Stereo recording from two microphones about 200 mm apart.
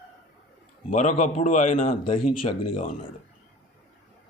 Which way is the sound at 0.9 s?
35° left (ahead or behind).